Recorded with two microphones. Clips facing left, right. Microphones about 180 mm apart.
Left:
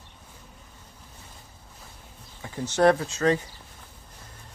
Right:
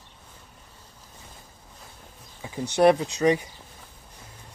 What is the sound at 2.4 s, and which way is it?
Speech, 15° right (ahead or behind).